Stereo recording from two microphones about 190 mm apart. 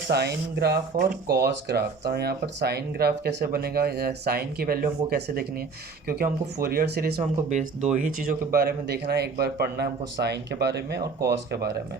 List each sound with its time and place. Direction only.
0.1 s speech: 60° right (ahead or behind)